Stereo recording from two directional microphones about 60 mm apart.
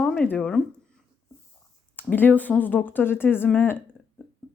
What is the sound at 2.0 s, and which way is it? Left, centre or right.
Speech, left.